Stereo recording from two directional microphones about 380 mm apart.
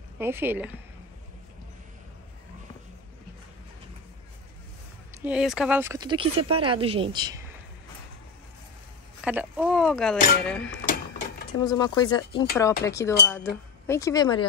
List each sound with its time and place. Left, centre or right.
0.2 s speech: centre
5.1 s speech: centre
9.2 s speech: centre
10.9 s printer: left
11.6 s speech: centre